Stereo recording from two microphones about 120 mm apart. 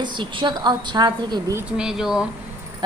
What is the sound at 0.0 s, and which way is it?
A woman's voice, 40° right (ahead or behind).